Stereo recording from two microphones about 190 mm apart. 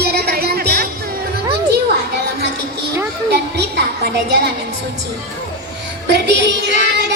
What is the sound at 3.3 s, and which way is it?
A woman's voice, 60° right (ahead or behind).